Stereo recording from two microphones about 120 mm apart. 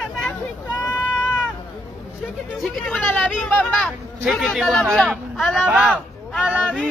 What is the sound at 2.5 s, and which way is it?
Speech, centre (ahead or behind).